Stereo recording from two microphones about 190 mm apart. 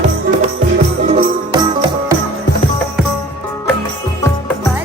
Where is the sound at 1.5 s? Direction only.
25° right (ahead or behind).